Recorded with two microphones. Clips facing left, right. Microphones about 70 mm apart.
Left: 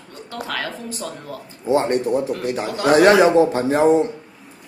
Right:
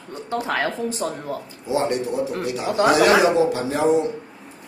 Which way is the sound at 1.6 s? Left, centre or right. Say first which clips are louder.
Left 4 dB; left.